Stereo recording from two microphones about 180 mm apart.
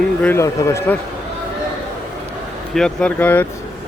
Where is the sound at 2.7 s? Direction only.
5° left (ahead or behind).